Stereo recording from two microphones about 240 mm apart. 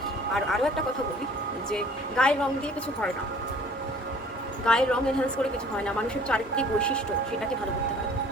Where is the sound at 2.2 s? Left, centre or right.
Centre.